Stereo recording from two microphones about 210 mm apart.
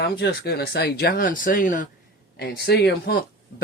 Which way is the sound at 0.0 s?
50° left (ahead or behind).